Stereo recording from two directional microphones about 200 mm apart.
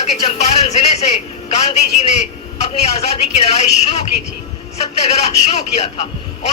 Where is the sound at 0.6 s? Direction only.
35° left (ahead or behind).